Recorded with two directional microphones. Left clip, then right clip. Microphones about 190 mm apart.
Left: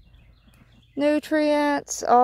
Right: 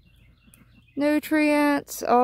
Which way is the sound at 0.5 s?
10° right (ahead or behind).